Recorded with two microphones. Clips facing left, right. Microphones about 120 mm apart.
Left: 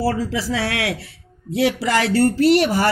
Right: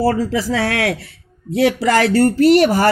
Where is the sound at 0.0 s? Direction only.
50° right (ahead or behind).